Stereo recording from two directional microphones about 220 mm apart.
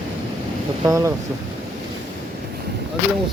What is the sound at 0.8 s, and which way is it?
Speech, 15° right (ahead or behind).